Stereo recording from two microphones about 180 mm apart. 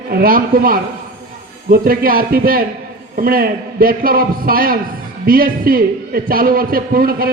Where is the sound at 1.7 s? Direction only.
55° right (ahead or behind).